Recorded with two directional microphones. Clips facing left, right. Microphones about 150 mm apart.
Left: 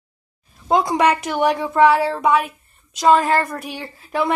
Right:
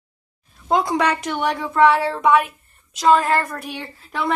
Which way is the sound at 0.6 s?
5° left (ahead or behind).